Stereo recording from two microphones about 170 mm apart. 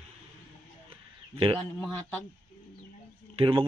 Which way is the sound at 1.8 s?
5° left (ahead or behind).